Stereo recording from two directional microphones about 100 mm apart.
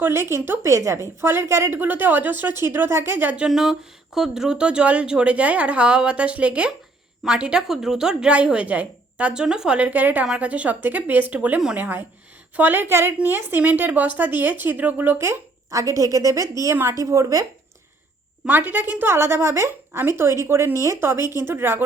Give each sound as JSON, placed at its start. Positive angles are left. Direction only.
{"t": 0.0, "sound": "a woman's voice", "side_deg": -25}
{"t": 18.4, "sound": "a woman's voice", "side_deg": -20}